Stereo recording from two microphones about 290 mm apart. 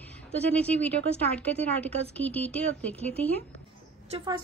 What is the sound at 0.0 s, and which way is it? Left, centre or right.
A woman's voice, centre.